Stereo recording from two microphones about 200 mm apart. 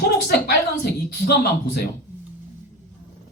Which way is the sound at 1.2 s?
50° left (ahead or behind).